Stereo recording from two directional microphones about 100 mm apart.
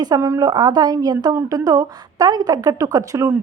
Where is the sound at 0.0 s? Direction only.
40° right (ahead or behind).